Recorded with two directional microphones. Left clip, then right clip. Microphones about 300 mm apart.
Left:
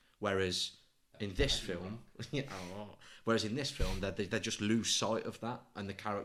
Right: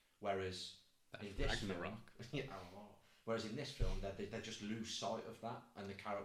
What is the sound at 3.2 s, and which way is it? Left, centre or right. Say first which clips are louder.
Speech: left 9 dB; left.